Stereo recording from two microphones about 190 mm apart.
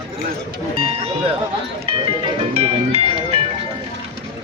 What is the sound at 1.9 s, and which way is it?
Music, 30° right (ahead or behind).